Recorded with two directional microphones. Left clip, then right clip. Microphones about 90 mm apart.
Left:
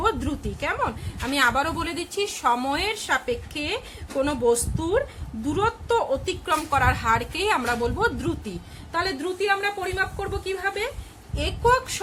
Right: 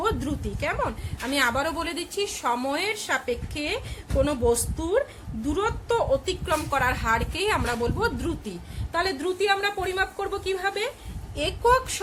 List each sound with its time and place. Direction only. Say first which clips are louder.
0.0 s a woman's voice: left 2 dB; 20° left (ahead or behind)
9.1 s a woman's voice: even; centre (ahead or behind)